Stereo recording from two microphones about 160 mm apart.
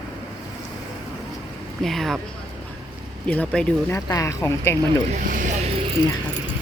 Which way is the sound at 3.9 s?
20° left (ahead or behind).